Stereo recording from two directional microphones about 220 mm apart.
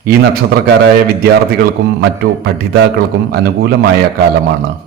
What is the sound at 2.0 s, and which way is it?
A man's voice, 50° right (ahead or behind).